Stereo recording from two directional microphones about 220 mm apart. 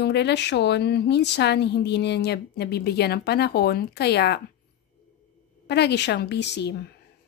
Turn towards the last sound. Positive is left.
turn(degrees=50)  # may be behind; listen again after turning